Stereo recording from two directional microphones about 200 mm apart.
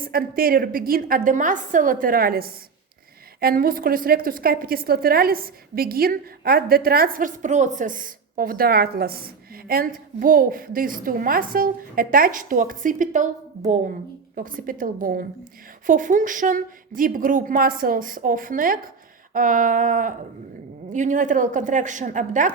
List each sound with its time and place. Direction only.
0.0 s a woman's voice: 50° right (ahead or behind)
14.3 s a woman's voice: 45° right (ahead or behind)